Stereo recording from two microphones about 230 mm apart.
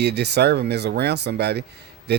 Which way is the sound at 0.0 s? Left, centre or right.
Right.